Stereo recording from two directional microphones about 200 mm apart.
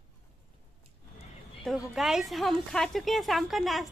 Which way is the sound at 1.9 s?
Centre (ahead or behind).